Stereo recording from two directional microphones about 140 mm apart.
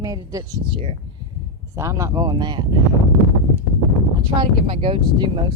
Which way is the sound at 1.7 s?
20° right (ahead or behind).